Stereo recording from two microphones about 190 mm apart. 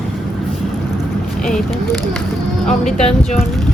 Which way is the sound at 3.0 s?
35° left (ahead or behind).